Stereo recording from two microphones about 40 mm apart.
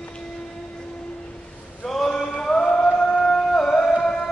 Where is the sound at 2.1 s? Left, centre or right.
Centre.